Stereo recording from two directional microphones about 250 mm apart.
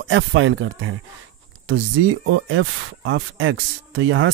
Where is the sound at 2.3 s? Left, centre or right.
Right.